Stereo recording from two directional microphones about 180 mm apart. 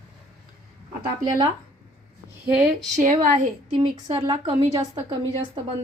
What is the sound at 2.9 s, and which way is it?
Speech, 45° right (ahead or behind).